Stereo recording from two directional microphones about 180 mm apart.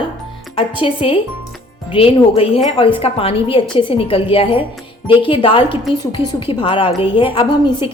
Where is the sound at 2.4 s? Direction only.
35° left (ahead or behind).